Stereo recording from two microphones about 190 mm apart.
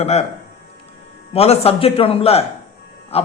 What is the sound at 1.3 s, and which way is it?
A man's voice, 30° left (ahead or behind).